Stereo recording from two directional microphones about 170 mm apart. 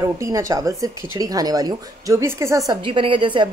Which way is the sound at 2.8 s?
30° right (ahead or behind).